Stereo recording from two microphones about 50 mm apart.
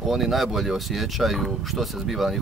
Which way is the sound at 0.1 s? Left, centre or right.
Centre.